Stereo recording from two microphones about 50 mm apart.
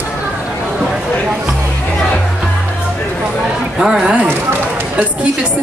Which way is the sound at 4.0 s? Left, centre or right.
Right.